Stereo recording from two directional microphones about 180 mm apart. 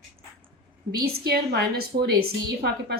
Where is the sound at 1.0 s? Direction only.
55° right (ahead or behind).